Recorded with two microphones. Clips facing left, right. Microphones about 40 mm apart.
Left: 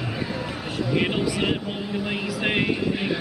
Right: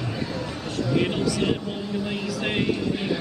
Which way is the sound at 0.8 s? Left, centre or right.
Centre.